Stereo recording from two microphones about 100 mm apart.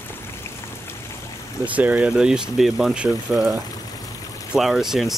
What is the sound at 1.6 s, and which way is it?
Speech, 15° right (ahead or behind).